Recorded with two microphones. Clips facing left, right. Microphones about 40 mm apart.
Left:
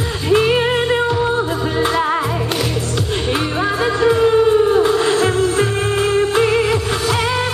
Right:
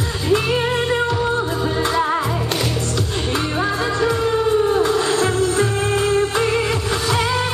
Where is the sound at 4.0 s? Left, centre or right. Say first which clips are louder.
Left 7 dB; centre.